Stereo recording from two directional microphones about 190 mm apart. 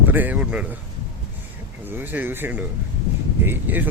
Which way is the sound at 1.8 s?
10° right (ahead or behind).